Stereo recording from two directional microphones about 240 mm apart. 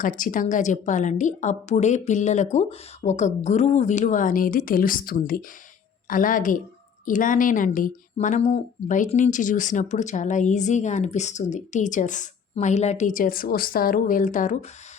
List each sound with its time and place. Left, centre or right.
0.0 s a woman's voice: left